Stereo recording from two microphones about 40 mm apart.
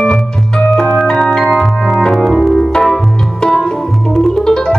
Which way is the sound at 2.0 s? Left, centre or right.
Centre.